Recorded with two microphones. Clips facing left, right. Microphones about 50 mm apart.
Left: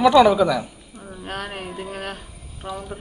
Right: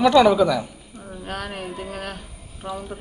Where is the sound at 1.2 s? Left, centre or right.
Left.